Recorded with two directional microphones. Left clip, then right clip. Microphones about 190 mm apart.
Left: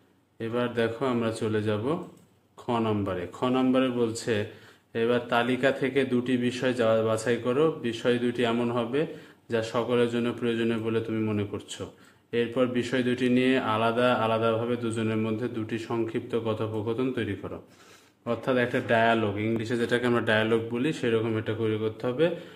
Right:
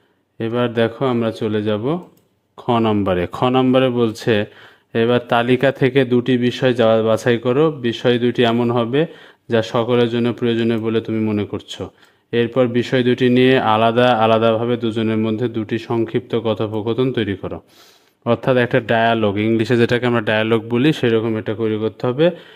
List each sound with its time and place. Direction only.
0.4 s a man's voice: 45° right (ahead or behind)